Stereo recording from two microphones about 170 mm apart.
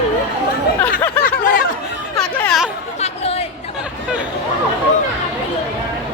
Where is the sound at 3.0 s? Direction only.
35° left (ahead or behind).